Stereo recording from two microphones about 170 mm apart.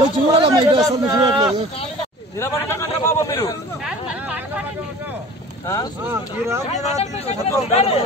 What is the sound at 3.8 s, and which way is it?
Chatter, 10° right (ahead or behind).